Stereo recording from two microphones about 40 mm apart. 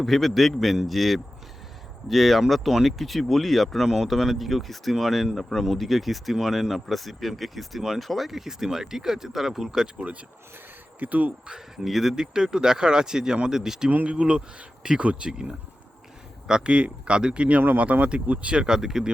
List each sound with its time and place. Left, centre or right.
0.0 s speech: centre
10.0 s speech: right
11.4 s speech: centre
11.9 s speech: centre
13.9 s speech: right
17.9 s speech: right
18.6 s speech: centre